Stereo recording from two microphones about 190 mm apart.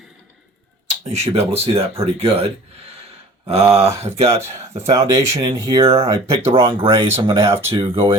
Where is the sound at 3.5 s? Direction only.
30° right (ahead or behind).